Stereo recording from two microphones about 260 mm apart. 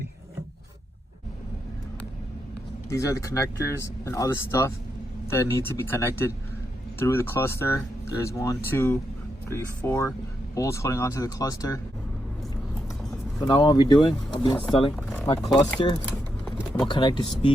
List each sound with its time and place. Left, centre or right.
2.9 s speech: centre
13.4 s speech: centre
14.9 s speech: centre
16.5 s pigeon: centre
16.9 s speech: centre